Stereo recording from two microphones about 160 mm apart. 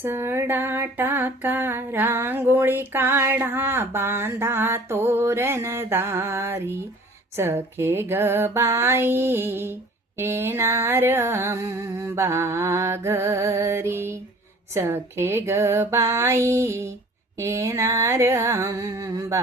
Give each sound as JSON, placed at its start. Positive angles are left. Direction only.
{"t": 0.0, "sound": "female singing", "side_deg": -15}
{"t": 17.4, "sound": "music", "side_deg": -20}